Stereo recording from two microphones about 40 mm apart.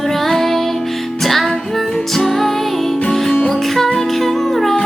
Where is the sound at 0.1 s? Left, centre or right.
Centre.